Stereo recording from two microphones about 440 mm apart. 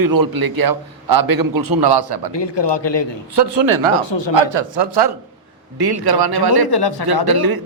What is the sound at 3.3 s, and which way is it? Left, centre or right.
Speech, right.